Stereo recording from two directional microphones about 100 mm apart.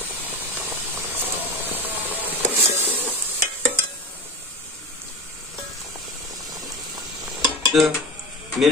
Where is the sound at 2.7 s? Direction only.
20° right (ahead or behind).